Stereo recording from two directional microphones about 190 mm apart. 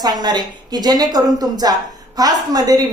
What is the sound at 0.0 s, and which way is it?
Speech, 20° right (ahead or behind).